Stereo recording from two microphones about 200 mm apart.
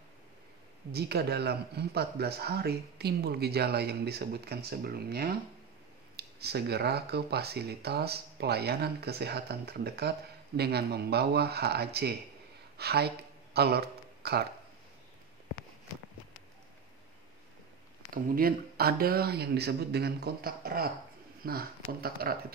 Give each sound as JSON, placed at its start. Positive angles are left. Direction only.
{"t": 0.9, "sound": "speech", "side_deg": -55}
{"t": 12.7, "sound": "a sound", "side_deg": -55}
{"t": 18.1, "sound": "speech", "side_deg": -45}